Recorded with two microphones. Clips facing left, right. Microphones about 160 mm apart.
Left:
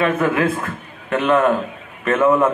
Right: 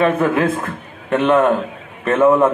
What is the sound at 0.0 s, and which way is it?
A man's voice, 30° right (ahead or behind).